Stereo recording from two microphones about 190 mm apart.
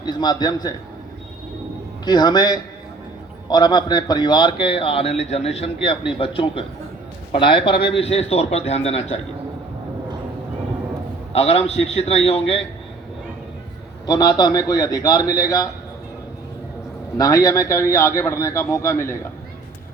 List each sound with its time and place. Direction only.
0.0 s a man's voice: 20° left (ahead or behind)
2.0 s a man's voice: 20° left (ahead or behind)
7.7 s a man's voice: 60° left (ahead or behind)
8.0 s a man's voice: 30° left (ahead or behind)
11.3 s a man's voice: 30° left (ahead or behind)
14.1 s a man's voice: 20° left (ahead or behind)
17.2 s a man's voice: 20° left (ahead or behind)